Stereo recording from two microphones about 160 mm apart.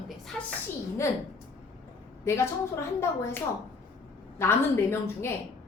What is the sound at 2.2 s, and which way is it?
A woman's voice, 15° left (ahead or behind).